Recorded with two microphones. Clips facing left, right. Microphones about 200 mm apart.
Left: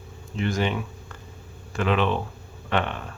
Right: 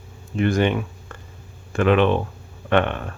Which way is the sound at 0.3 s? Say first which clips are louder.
Right 6 dB; 55° right (ahead or behind).